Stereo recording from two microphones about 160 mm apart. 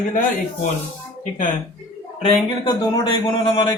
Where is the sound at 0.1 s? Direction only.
55° left (ahead or behind).